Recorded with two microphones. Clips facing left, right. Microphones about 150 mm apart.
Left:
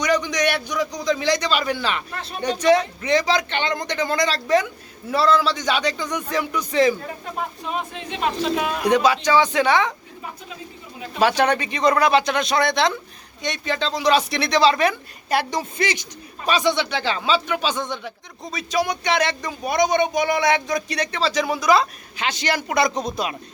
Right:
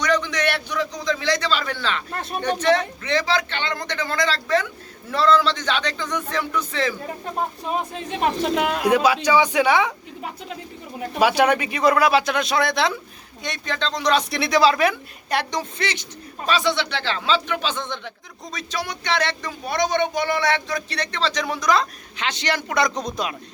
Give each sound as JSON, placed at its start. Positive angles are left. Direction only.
{"t": 0.0, "sound": "a man's voice", "side_deg": 10}
{"t": 2.1, "sound": "speech", "side_deg": -50}
{"t": 2.6, "sound": "speech", "side_deg": 10}
{"t": 7.7, "sound": "speech", "side_deg": -40}
{"t": 8.8, "sound": "speech", "side_deg": -5}
{"t": 10.2, "sound": "a sound", "side_deg": -70}
{"t": 11.2, "sound": "speech", "side_deg": -10}